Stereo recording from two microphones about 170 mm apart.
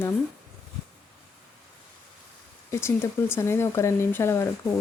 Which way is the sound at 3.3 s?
15° left (ahead or behind).